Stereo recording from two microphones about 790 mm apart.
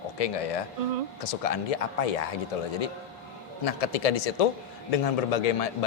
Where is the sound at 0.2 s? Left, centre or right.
Left.